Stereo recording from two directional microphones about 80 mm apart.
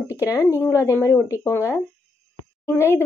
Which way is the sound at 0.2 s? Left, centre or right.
Left.